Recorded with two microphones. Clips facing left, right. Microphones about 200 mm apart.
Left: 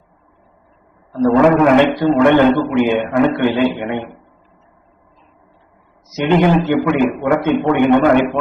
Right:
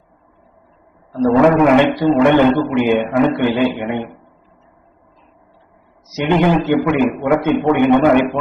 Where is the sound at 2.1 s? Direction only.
15° right (ahead or behind).